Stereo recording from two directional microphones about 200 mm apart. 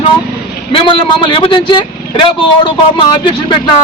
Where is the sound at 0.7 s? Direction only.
25° left (ahead or behind).